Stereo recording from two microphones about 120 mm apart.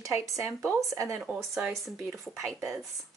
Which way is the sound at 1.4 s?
5° right (ahead or behind).